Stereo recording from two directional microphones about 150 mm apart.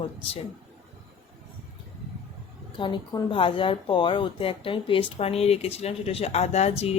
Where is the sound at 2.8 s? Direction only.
30° left (ahead or behind).